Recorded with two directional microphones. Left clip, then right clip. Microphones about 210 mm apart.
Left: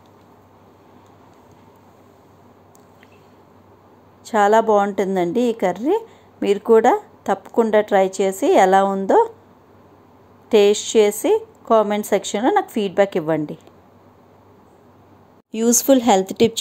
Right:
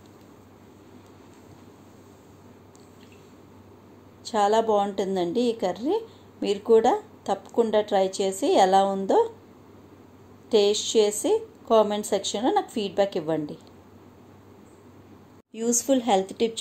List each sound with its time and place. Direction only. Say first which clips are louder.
4.3 s a woman's voice: left 7 dB; 35° left (ahead or behind)
10.5 s a woman's voice: left 6 dB; 35° left (ahead or behind)
15.5 s speech: left 8 dB; 40° left (ahead or behind)